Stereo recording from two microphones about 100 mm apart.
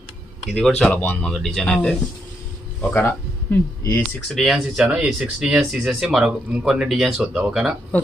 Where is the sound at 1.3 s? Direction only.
Centre (ahead or behind).